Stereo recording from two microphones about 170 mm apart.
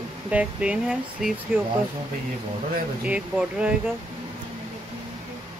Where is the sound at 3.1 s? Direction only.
5° right (ahead or behind).